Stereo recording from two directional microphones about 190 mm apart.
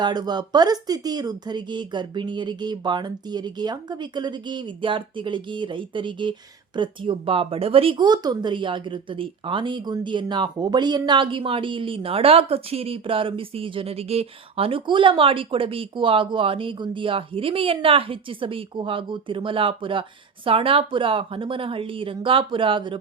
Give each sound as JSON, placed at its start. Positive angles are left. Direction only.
{"t": 0.0, "sound": "speech", "side_deg": -20}